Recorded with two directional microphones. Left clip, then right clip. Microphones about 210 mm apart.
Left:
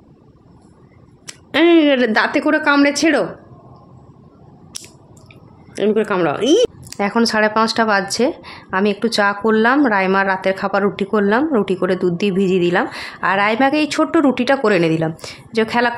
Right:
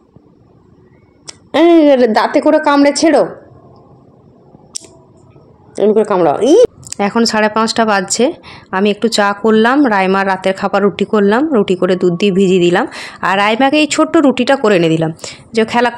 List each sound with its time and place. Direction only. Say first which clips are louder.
1.2 s a woman's voice: right 4 dB; 5° left (ahead or behind)
4.7 s squish: right 5 dB; centre (ahead or behind)
5.8 s a woman's voice: right 6 dB; 5° left (ahead or behind)
6.9 s a woman's voice: right 3 dB; 20° right (ahead or behind)